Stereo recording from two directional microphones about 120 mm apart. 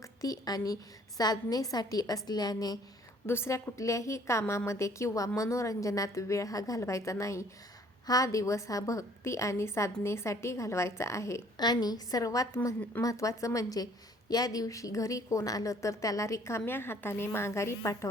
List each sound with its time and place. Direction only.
0.2 s a woman's voice: 30° left (ahead or behind)
3.2 s a woman's voice: 20° left (ahead or behind)
11.6 s a woman's voice: 35° left (ahead or behind)